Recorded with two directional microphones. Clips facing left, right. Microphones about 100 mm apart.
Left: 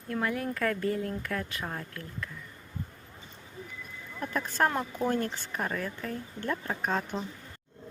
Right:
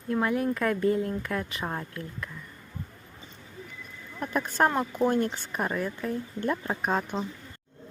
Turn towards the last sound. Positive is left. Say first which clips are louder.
# right 3 dB
turn(degrees=-15)  # may be behind; listen again after turning